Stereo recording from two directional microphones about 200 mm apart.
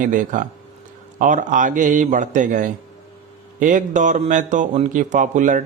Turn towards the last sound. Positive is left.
turn(degrees=-40)  # may be behind; listen again after turning